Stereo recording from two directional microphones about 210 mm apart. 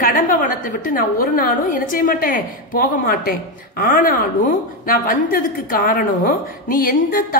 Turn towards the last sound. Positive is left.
turn(degrees=40)  # may be behind; listen again after turning